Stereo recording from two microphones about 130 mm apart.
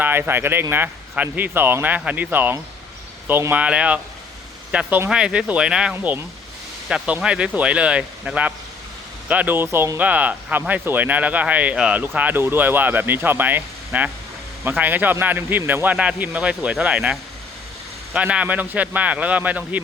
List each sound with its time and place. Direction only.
0.0 s speech: 15° right (ahead or behind)